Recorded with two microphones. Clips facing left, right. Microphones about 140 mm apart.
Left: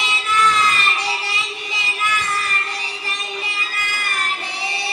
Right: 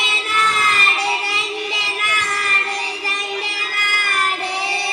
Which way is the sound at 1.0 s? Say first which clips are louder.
Right 3 dB; 60° right (ahead or behind).